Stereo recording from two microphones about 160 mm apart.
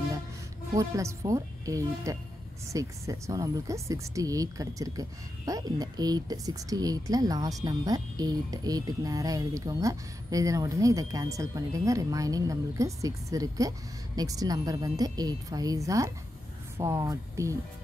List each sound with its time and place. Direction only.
0.7 s a woman's voice: 20° right (ahead or behind)